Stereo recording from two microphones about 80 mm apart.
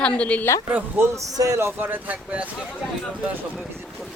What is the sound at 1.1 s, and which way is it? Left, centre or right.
Speech, right.